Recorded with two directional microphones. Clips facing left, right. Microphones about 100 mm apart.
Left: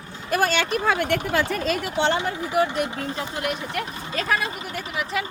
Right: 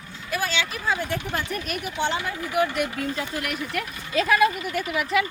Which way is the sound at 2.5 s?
35° left (ahead or behind).